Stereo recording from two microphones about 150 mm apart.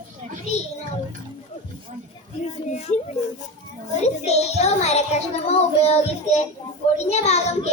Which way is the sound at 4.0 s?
45° left (ahead or behind).